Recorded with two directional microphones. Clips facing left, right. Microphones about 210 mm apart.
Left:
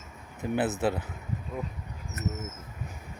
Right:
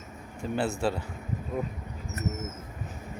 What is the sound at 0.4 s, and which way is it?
Speech, 20° left (ahead or behind).